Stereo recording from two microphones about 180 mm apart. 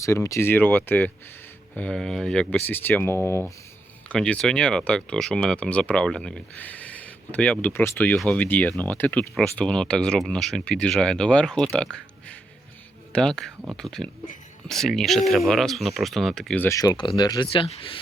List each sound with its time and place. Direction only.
0.0 s speech: 15° left (ahead or behind)
13.1 s speech: 5° left (ahead or behind)
16.6 s speech: 20° left (ahead or behind)